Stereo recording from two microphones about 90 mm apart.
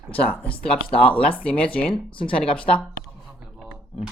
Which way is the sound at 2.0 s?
75° left (ahead or behind).